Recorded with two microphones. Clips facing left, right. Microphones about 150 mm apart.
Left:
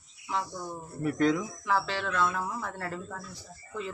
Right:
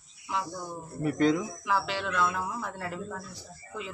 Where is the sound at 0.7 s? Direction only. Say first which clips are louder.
Right 1 dB; centre (ahead or behind).